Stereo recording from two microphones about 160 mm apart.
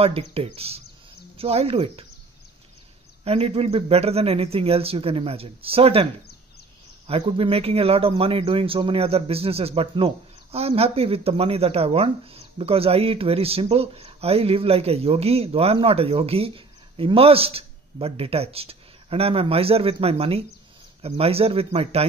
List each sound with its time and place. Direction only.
0.0 s speech: 35° right (ahead or behind)
3.3 s speech: 35° right (ahead or behind)
7.1 s speech: 35° right (ahead or behind)